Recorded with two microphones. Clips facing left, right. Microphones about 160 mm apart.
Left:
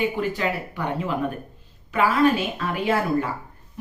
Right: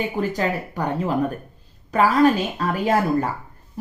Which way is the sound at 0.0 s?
40° right (ahead or behind).